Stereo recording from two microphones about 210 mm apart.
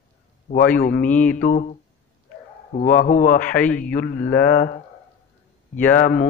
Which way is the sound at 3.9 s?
45° left (ahead or behind).